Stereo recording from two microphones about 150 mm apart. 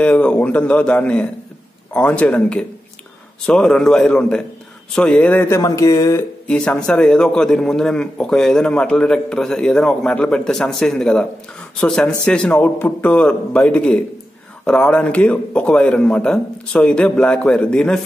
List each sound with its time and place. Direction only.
0.0 s a man's voice: 5° left (ahead or behind)
6.4 s a man's voice: 5° left (ahead or behind)